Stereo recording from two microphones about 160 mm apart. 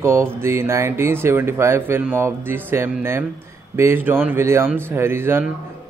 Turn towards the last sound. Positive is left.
turn(degrees=-15)  # may be behind; listen again after turning